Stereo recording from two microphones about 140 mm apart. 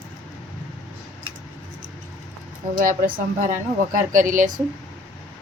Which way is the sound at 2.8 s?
75° right (ahead or behind).